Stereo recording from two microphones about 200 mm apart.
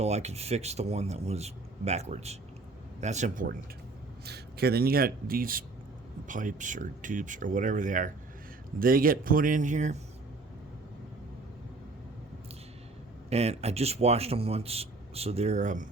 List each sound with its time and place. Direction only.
0.0 s a man's voice: 35° right (ahead or behind)
4.3 s a man's voice: 50° right (ahead or behind)
13.3 s a man's voice: 30° right (ahead or behind)